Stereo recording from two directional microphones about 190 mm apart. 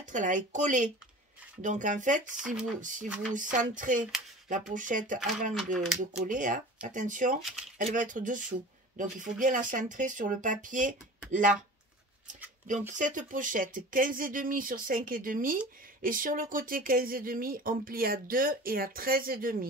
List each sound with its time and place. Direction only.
0.0 s speech: 40° right (ahead or behind)
5.5 s speech: centre (ahead or behind)
6.2 s speech: 45° right (ahead or behind)
7.4 s speech: 5° right (ahead or behind)
7.8 s speech: 45° right (ahead or behind)
12.9 s speech: 40° right (ahead or behind)